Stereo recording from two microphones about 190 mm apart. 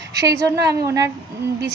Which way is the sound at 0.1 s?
20° right (ahead or behind).